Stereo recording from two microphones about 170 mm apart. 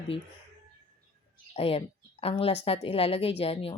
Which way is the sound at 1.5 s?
35° left (ahead or behind).